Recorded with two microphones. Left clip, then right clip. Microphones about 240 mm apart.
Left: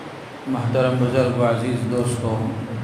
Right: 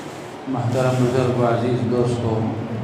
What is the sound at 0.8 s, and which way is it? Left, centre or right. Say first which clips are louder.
Speech: left 1 dB; left.